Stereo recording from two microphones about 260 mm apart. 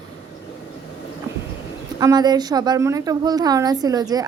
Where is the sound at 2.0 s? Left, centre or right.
Centre.